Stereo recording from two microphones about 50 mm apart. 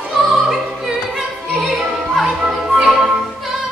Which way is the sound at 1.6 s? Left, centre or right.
Centre.